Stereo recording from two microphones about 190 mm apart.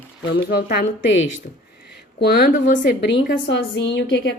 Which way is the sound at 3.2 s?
70° left (ahead or behind).